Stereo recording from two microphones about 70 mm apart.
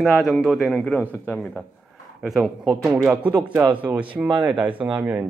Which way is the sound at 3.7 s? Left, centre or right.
Right.